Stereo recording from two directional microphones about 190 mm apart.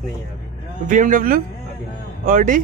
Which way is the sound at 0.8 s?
45° right (ahead or behind).